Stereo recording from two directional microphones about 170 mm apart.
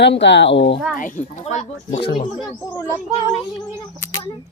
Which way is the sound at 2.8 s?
20° left (ahead or behind).